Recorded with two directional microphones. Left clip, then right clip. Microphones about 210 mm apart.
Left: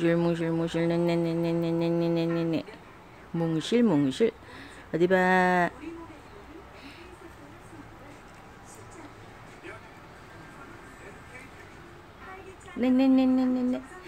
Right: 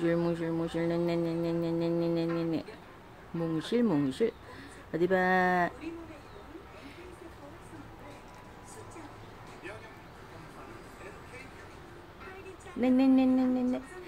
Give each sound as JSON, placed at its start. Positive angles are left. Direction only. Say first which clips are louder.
{"t": 0.0, "sound": "mantra", "louder": "left 4 dB", "side_deg": 25}
{"t": 12.8, "sound": "speech", "louder": "left 2 dB", "side_deg": 15}